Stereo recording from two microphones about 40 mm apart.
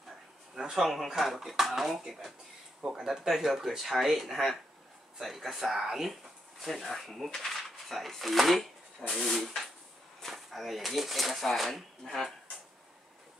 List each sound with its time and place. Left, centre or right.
0.6 s speech: centre
0.8 s speech: centre